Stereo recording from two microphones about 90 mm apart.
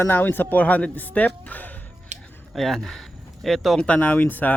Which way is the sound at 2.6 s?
5° left (ahead or behind).